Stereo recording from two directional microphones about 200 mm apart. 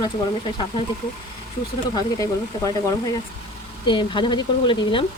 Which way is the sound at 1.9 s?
20° left (ahead or behind).